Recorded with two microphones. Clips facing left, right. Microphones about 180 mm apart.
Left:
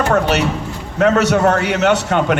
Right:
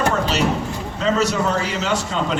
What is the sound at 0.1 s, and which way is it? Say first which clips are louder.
A man's voice: left 4 dB; 65° left (ahead or behind).